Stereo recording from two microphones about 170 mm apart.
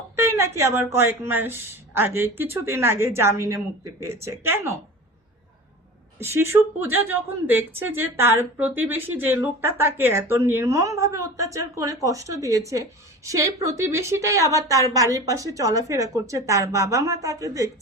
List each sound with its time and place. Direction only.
0.2 s speech: 15° right (ahead or behind)
6.2 s a woman's voice: 15° right (ahead or behind)